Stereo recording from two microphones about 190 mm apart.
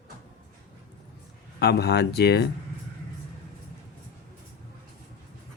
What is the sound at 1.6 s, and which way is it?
Speech, 60° left (ahead or behind).